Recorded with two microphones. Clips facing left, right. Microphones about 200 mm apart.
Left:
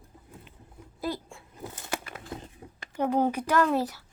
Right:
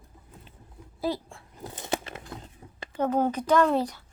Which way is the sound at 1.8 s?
25° right (ahead or behind).